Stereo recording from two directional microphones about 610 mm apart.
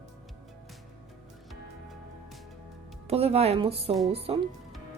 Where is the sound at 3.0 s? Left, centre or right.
Centre.